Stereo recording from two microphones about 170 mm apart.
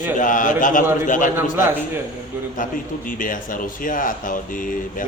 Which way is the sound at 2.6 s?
50° left (ahead or behind).